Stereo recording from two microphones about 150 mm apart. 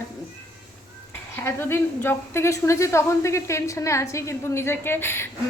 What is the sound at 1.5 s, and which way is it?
A woman's voice, 15° left (ahead or behind).